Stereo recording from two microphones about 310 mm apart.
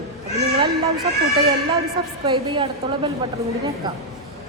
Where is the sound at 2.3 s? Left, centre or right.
Centre.